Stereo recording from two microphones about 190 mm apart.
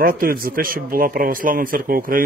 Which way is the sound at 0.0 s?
50° right (ahead or behind).